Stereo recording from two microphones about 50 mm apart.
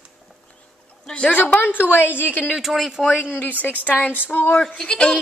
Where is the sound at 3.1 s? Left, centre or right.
Left.